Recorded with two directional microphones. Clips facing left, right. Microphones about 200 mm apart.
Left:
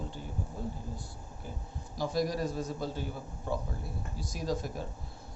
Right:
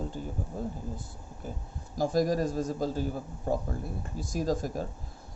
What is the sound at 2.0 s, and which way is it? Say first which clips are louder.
Speech: right 5 dB; 45° right (ahead or behind).